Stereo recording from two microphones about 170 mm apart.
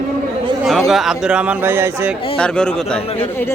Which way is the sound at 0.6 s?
Centre (ahead or behind).